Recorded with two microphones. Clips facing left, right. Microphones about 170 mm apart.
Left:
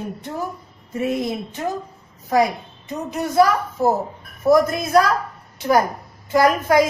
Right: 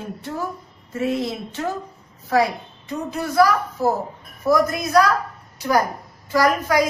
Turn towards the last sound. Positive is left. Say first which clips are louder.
# left 3 dB
turn(degrees=25)  # may be behind; listen again after turning